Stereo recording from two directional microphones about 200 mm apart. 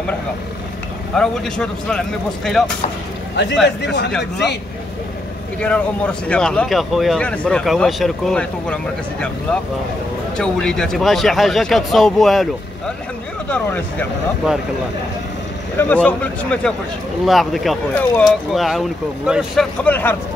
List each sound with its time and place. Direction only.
1.1 s speech: 5° left (ahead or behind)
3.6 s a man's voice: 60° left (ahead or behind)
5.6 s speech: 5° left (ahead or behind)
10.3 s speech: 5° left (ahead or behind)
13.5 s speech: 5° left (ahead or behind)
15.8 s speech: 10° left (ahead or behind)